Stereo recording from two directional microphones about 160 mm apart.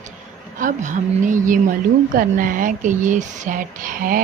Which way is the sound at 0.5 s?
50° right (ahead or behind).